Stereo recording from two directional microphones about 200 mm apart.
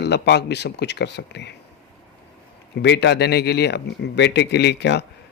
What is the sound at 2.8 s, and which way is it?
Speech, 60° left (ahead or behind).